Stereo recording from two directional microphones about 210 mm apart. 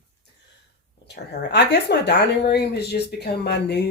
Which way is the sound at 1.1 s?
55° left (ahead or behind).